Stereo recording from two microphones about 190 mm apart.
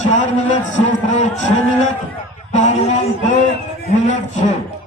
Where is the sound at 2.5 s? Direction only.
40° left (ahead or behind).